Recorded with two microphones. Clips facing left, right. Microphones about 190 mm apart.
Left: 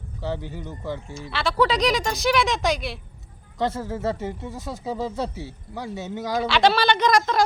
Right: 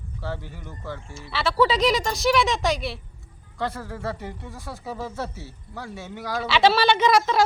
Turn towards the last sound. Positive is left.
turn(degrees=-5)  # may be behind; listen again after turning